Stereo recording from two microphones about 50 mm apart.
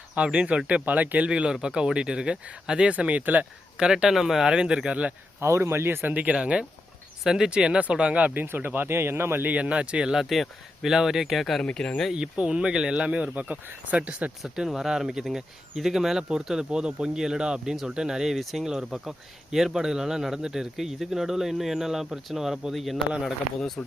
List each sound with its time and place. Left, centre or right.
0.1 s speech: right
1.3 s speech: centre
3.8 s speech: centre
5.4 s speech: right
6.1 s speech: right
9.6 s speech: right
10.1 s speech: centre
11.6 s speech: centre
12.1 s speech: centre
14.4 s speech: centre